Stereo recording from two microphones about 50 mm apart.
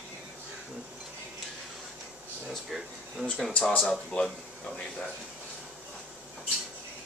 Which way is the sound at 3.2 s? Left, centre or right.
Centre.